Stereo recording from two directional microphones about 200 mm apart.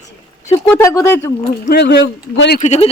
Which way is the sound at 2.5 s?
35° left (ahead or behind).